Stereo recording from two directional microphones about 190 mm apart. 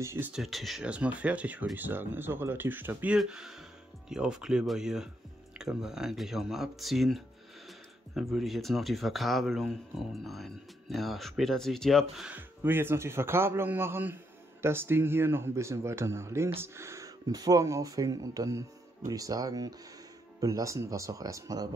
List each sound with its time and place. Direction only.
0.0 s speech: 10° right (ahead or behind)